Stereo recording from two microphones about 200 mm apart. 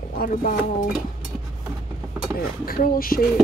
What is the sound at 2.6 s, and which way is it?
Speech, 45° left (ahead or behind).